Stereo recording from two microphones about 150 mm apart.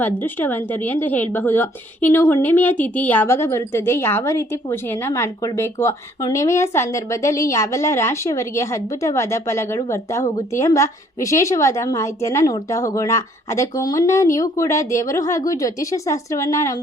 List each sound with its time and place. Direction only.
0.2 s a woman's voice: 15° left (ahead or behind)